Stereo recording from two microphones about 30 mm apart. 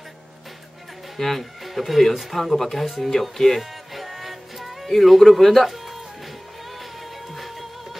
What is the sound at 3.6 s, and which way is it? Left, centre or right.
Music, centre.